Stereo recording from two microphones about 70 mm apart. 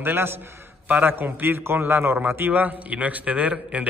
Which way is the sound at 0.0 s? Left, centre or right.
Right.